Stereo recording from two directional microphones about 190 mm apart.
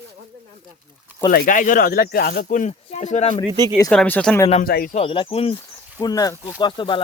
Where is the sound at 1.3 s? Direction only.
45° left (ahead or behind).